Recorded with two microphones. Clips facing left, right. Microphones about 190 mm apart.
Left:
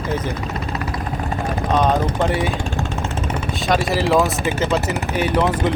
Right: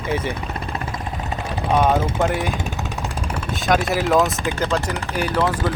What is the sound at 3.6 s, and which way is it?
Speech, centre (ahead or behind).